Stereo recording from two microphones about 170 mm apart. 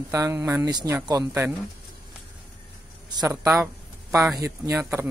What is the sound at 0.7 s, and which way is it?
Speech, 25° right (ahead or behind).